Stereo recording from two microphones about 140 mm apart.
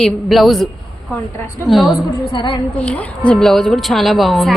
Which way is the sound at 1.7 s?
Centre (ahead or behind).